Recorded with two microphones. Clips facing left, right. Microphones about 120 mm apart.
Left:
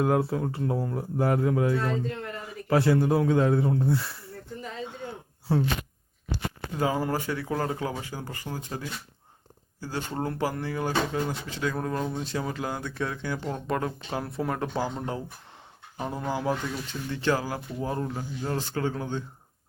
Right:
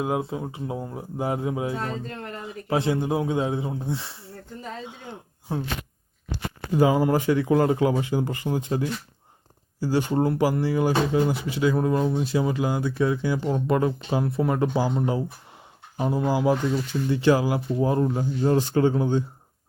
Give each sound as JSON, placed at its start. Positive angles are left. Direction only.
{"t": 0.0, "sound": "speech", "side_deg": -15}
{"t": 5.5, "sound": "speech", "side_deg": -15}
{"t": 6.7, "sound": "speech", "side_deg": -10}
{"t": 9.8, "sound": "speech", "side_deg": -10}